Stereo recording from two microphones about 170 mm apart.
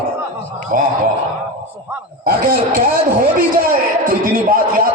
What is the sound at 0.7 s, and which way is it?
Speech, 55° right (ahead or behind).